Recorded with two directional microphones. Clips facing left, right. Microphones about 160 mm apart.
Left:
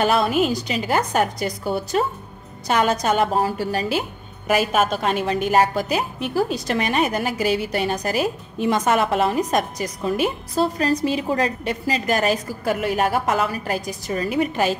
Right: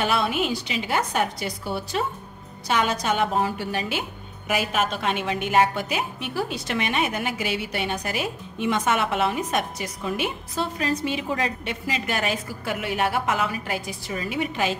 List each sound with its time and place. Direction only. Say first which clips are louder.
0.0 s a woman's voice: left 5 dB; 40° left (ahead or behind)